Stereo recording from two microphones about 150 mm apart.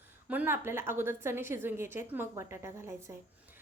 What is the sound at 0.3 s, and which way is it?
A woman's voice, 15° right (ahead or behind).